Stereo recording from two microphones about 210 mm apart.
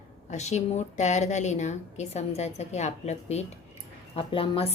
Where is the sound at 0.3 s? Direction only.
35° left (ahead or behind).